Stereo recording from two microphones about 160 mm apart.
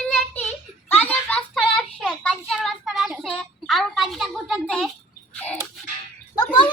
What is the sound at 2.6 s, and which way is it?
Child singing, centre (ahead or behind).